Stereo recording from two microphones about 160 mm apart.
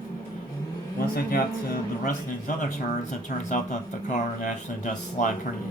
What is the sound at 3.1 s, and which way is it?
Speech, 50° left (ahead or behind).